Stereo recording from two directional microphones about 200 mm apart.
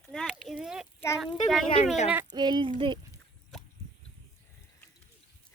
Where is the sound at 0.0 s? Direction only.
Centre (ahead or behind).